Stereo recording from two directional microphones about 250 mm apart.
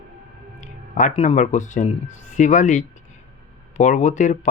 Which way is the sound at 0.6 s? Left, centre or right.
Left.